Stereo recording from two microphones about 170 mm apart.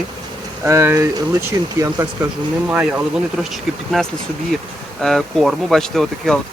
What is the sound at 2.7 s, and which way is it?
Speech, 10° right (ahead or behind).